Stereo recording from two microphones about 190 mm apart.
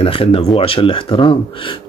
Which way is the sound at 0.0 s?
30° left (ahead or behind).